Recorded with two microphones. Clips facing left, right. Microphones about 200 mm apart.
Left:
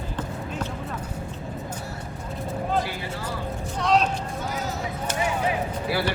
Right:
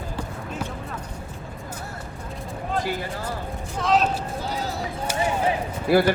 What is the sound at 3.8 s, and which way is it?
Speech, centre (ahead or behind).